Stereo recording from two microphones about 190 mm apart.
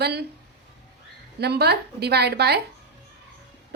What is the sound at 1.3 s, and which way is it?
Speech, 60° right (ahead or behind).